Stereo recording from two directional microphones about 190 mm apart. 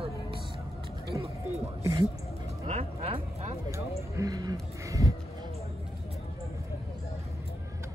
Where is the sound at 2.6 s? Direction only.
35° right (ahead or behind).